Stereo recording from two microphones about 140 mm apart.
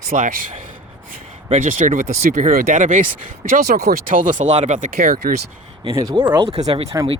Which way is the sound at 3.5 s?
90° right.